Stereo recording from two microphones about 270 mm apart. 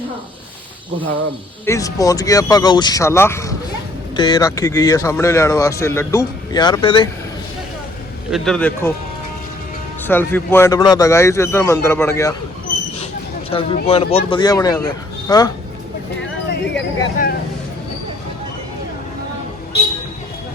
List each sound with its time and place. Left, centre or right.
1.6 s speech: centre
8.3 s a man's voice: centre
10.1 s speech: centre
13.5 s speech: centre
16.7 s speech: left